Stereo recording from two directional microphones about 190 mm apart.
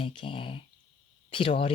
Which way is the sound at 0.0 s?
30° left (ahead or behind).